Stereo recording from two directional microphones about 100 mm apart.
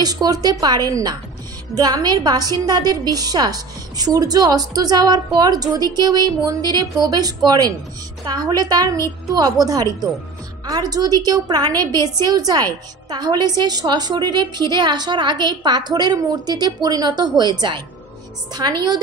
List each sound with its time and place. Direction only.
0.0 s a woman's voice: 40° right (ahead or behind)